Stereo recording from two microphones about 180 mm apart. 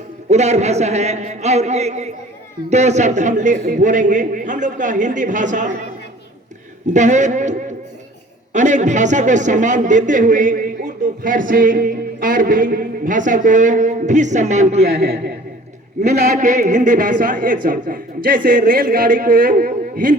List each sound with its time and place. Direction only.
0.3 s a woman's voice: 40° right (ahead or behind)
6.8 s a woman's voice: 40° right (ahead or behind)
8.5 s a man's voice: 40° right (ahead or behind)
16.0 s a man's voice: 40° right (ahead or behind)